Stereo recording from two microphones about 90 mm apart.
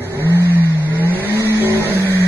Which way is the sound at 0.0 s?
25° right (ahead or behind).